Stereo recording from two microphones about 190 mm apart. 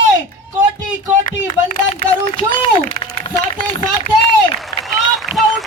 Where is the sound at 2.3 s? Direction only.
30° left (ahead or behind).